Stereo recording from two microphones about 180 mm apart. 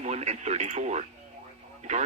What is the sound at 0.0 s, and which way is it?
Speech, 40° right (ahead or behind).